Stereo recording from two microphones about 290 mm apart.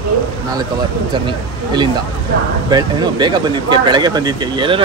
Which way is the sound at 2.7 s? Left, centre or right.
Centre.